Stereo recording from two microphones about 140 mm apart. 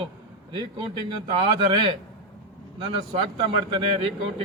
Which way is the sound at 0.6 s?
30° right (ahead or behind).